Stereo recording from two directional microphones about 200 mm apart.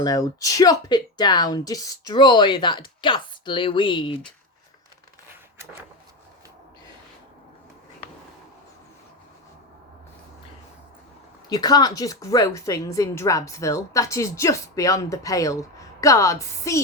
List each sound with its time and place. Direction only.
0.0 s speech: 15° left (ahead or behind)
11.4 s speech: 20° left (ahead or behind)